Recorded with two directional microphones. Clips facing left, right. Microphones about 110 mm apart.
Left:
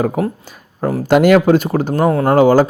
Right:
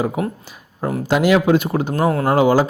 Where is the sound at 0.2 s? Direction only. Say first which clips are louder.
Left 4 dB; 40° left (ahead or behind).